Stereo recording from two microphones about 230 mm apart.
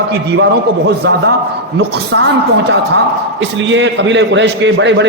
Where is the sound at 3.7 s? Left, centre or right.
Right.